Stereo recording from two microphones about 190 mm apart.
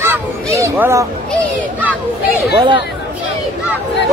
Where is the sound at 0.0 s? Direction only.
15° right (ahead or behind).